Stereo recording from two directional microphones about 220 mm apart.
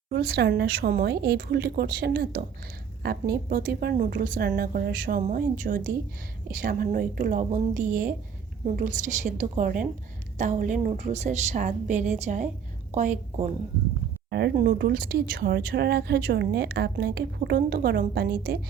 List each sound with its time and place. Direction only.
0.1 s a woman's voice: 45° right (ahead or behind)
14.3 s speech: 50° right (ahead or behind)